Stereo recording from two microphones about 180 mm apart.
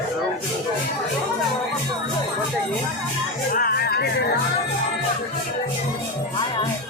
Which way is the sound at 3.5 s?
55° left (ahead or behind).